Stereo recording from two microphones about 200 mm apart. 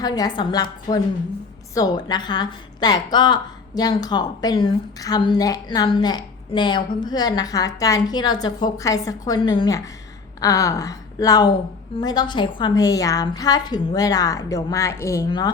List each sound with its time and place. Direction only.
0.0 s a woman's voice: 20° left (ahead or behind)